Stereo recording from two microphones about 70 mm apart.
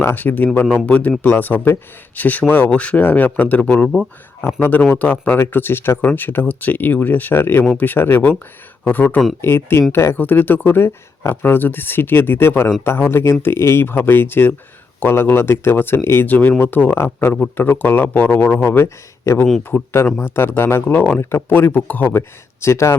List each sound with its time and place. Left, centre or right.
0.0 s a man's voice: left
4.4 s speech: left
4.9 s a man's voice: left
9.4 s a man's voice: left
11.2 s speech: left
11.5 s speech: left
17.0 s a man's voice: left
22.6 s speech: left